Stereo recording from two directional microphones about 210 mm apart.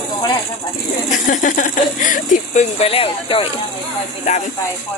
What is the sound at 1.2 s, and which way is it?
Speech, 35° left (ahead or behind).